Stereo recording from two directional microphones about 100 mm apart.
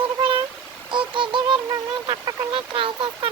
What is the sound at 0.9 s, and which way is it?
Speech, 55° right (ahead or behind).